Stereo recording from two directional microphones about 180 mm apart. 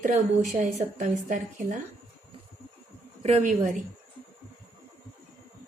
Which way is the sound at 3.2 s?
40° right (ahead or behind).